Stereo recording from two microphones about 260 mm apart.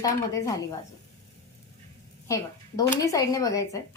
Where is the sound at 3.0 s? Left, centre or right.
Centre.